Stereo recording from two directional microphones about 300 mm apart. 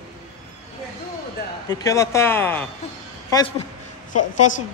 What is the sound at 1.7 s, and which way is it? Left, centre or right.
Speech, centre.